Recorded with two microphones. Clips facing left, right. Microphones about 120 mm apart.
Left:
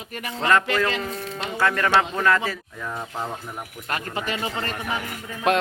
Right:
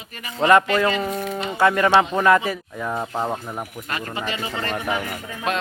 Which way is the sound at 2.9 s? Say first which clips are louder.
Right 6 dB; 30° right (ahead or behind).